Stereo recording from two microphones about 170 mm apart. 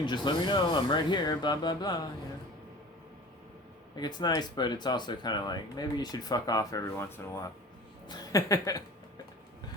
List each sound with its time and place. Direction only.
0.0 s speech: 25° left (ahead or behind)
4.0 s speech: 25° left (ahead or behind)